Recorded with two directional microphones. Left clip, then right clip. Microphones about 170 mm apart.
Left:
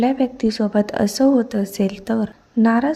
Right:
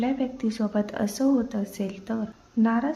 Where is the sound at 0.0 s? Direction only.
35° left (ahead or behind).